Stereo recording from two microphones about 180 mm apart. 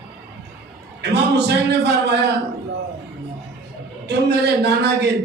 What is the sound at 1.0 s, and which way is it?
A man's voice, 70° right (ahead or behind).